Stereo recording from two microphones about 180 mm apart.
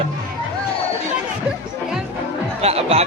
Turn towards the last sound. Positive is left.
turn(degrees=-35)  # may be behind; listen again after turning